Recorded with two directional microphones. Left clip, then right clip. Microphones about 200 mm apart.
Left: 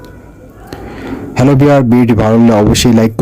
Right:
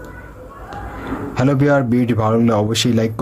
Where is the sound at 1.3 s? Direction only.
50° left (ahead or behind).